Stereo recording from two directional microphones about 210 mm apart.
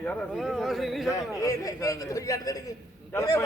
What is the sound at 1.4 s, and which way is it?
A man's voice, 15° left (ahead or behind).